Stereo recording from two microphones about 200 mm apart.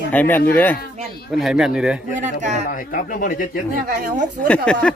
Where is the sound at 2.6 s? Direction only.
45° left (ahead or behind).